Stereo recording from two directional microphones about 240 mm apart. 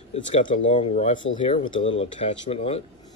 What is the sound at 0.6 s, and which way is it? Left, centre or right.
Speech, left.